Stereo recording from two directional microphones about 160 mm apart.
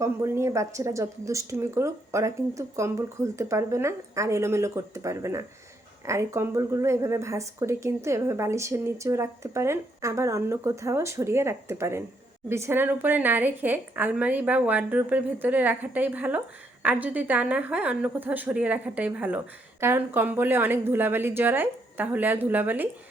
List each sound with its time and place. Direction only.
0.0 s speech: 15° right (ahead or behind)